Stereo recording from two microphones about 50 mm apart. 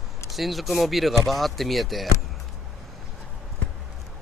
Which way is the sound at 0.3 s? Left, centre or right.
Centre.